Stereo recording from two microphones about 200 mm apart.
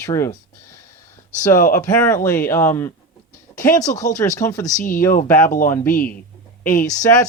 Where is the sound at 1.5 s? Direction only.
45° left (ahead or behind).